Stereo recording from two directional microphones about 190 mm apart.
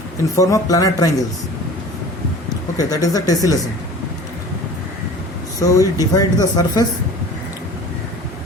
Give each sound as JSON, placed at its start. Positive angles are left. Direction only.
{"t": 0.3, "sound": "speech", "side_deg": 20}
{"t": 2.7, "sound": "speech", "side_deg": 20}
{"t": 5.5, "sound": "speech", "side_deg": 20}